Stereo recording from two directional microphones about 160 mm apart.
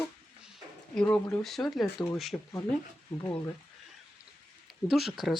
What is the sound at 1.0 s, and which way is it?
Speech, 5° left (ahead or behind).